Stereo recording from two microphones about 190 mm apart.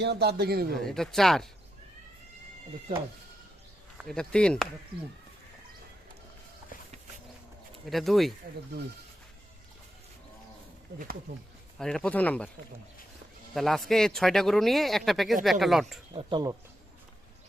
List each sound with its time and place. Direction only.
0.0 s a man's voice: 60° right (ahead or behind)
0.8 s speech: centre (ahead or behind)
3.9 s speech: centre (ahead or behind)
4.9 s speech: 25° right (ahead or behind)
7.9 s speech: centre (ahead or behind)
11.8 s speech: 5° left (ahead or behind)
13.5 s speech: centre (ahead or behind)
16.1 s speech: 20° right (ahead or behind)